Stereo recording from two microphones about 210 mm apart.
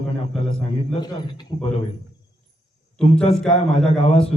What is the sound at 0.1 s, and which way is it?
A man's voice, 25° left (ahead or behind).